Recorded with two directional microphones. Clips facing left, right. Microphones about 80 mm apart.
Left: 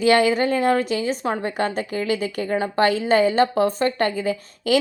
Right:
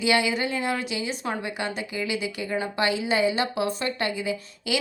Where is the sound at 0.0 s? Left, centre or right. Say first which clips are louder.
Left 7 dB; left.